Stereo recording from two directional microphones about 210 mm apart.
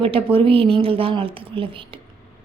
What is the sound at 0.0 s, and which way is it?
Speech, 25° right (ahead or behind).